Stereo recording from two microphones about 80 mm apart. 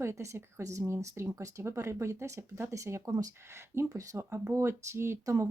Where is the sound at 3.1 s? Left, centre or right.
Right.